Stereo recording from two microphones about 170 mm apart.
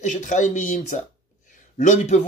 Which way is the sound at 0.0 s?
45° left (ahead or behind).